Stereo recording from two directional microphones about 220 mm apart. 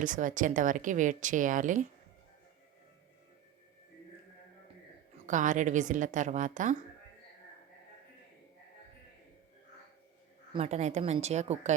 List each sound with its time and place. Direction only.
0.0 s speech: 35° right (ahead or behind)
5.2 s speech: 35° right (ahead or behind)
10.5 s speech: 30° right (ahead or behind)